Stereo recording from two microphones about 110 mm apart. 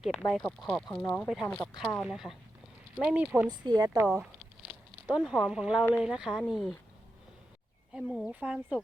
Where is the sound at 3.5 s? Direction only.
40° right (ahead or behind).